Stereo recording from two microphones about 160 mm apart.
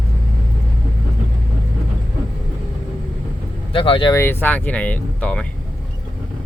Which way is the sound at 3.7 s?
30° left (ahead or behind).